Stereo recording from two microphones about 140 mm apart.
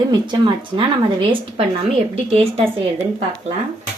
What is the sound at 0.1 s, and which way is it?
Speech, 35° right (ahead or behind).